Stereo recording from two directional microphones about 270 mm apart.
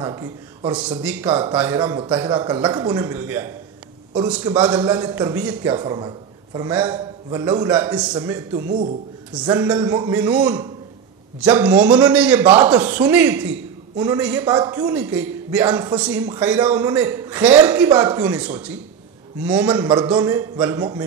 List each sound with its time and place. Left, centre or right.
0.0 s a man's voice: centre
1.8 s a man's voice: centre
4.6 s a man's voice: centre
7.0 s a man's voice: centre
8.6 s speech: right
9.3 s a man's voice: centre
9.8 s a man's voice: centre